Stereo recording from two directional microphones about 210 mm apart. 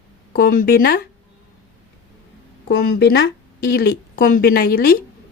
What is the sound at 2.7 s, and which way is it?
Speech, 50° left (ahead or behind).